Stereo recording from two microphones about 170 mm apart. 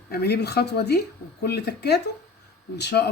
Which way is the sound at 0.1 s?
70° left (ahead or behind).